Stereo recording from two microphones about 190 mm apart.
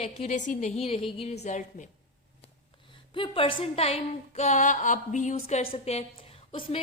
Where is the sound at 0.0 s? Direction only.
35° left (ahead or behind).